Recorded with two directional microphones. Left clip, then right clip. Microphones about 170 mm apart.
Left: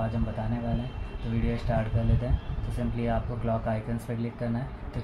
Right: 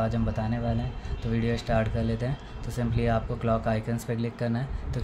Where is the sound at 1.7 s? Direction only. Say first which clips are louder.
Right 3 dB; 55° right (ahead or behind).